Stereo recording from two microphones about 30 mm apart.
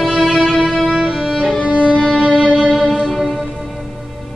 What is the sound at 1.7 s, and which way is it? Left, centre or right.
Music, left.